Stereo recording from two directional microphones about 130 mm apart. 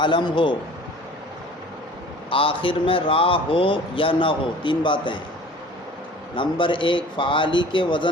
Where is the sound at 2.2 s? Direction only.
40° left (ahead or behind).